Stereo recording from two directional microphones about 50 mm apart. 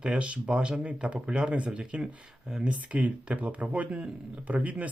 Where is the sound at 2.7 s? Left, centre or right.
Right.